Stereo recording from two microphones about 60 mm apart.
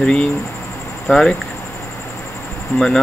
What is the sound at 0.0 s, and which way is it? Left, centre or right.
Speech, centre.